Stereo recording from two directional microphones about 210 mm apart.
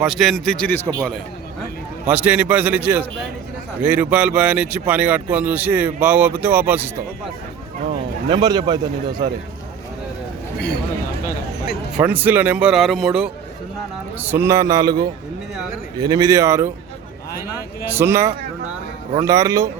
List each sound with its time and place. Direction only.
0.0 s speech: centre (ahead or behind)
2.0 s speech: 5° right (ahead or behind)
8.3 s a man's voice: 20° right (ahead or behind)
11.9 s speech: 5° right (ahead or behind)
17.8 s speech: 10° right (ahead or behind)